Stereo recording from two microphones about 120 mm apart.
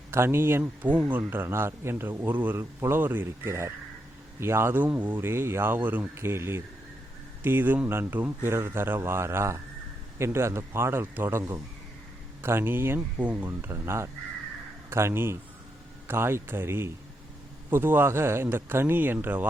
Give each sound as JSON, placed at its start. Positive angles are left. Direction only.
{"t": 0.1, "sound": "speech", "side_deg": -20}